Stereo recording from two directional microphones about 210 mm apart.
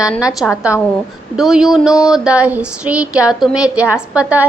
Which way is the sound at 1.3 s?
Centre (ahead or behind).